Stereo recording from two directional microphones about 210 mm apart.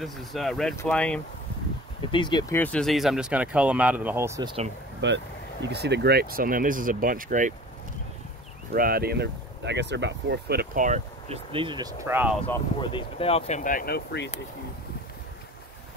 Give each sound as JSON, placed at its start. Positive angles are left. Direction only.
{"t": 0.0, "sound": "speech", "side_deg": 0}
{"t": 2.0, "sound": "speech", "side_deg": 20}
{"t": 2.5, "sound": "speech", "side_deg": 5}
{"t": 5.0, "sound": "speech", "side_deg": -55}
{"t": 8.7, "sound": "speech", "side_deg": -45}
{"t": 12.8, "sound": "speech", "side_deg": 25}